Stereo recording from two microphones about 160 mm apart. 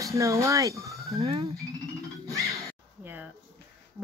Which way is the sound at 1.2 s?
35° right (ahead or behind).